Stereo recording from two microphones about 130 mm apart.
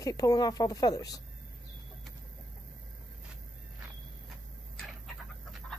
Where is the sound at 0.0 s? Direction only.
30° left (ahead or behind).